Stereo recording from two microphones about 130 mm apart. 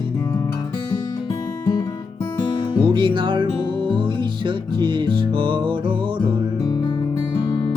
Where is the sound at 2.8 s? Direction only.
40° right (ahead or behind).